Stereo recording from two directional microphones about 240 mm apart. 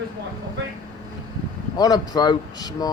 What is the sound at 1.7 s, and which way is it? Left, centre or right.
A man's voice, centre.